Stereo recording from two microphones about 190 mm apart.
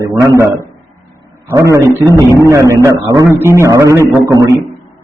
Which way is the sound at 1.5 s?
15° right (ahead or behind).